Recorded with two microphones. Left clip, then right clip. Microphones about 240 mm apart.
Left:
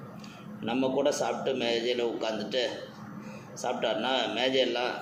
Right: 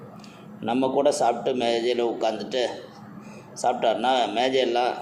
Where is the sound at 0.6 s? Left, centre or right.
Right.